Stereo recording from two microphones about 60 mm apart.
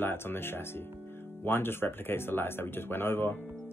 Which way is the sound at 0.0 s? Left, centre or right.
Left.